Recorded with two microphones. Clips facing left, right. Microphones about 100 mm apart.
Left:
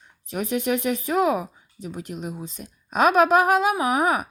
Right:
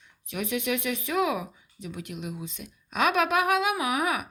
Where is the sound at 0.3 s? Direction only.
35° left (ahead or behind).